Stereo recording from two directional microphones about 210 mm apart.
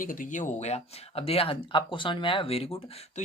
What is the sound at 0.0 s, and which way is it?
Speech, 40° left (ahead or behind).